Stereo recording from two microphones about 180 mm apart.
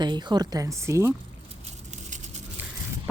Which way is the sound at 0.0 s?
25° right (ahead or behind).